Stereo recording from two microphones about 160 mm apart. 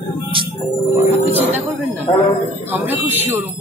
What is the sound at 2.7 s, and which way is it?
Speech, 10° right (ahead or behind).